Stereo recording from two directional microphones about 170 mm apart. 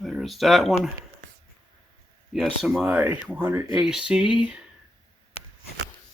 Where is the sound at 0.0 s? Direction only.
Centre (ahead or behind).